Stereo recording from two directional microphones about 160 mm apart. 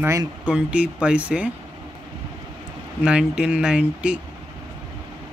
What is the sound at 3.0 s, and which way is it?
Speech, 5° right (ahead or behind).